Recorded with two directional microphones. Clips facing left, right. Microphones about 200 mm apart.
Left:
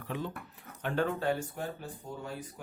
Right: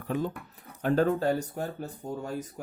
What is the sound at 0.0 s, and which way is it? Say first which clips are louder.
Speech: right 6 dB; 45° right (ahead or behind).